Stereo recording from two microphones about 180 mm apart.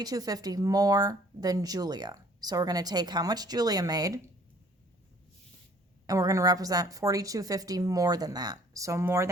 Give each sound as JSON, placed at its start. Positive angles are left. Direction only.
{"t": 0.0, "sound": "speech", "side_deg": -20}
{"t": 6.1, "sound": "speech", "side_deg": -20}